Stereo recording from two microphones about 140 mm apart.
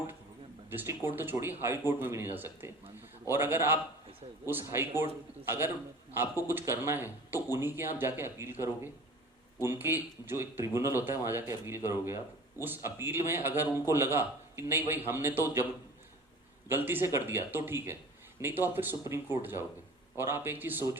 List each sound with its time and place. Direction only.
0.7 s a man's voice: 15° right (ahead or behind)
16.6 s a man's voice: 15° right (ahead or behind)